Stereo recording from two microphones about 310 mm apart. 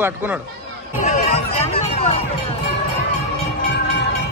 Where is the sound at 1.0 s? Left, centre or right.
Left.